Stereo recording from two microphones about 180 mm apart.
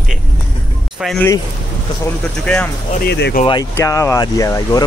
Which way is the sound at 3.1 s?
70° left (ahead or behind).